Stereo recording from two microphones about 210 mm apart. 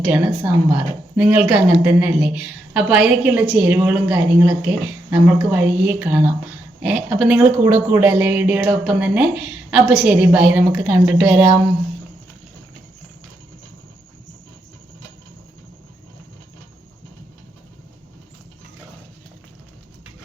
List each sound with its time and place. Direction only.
0.0 s a woman's voice: 5° right (ahead or behind)